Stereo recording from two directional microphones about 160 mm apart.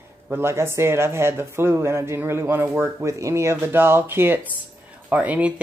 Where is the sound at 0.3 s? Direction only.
15° right (ahead or behind).